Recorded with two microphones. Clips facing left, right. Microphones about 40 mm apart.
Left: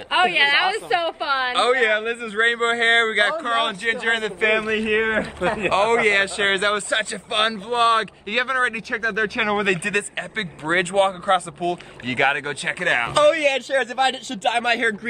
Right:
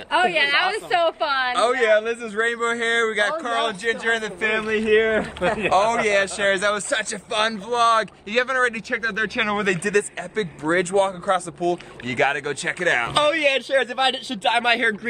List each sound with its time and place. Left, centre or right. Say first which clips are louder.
0.4 s a woman's voice: left 2 dB; centre
1.5 s a man's voice: right 1 dB; left
3.4 s a man's voice: left 1 dB; left
8.9 s a woman's voice: left 1 dB; centre
9.8 s a man's voice: right 2 dB; left; by 13.1 s centre
13.2 s a man's voice: left 4 dB; centre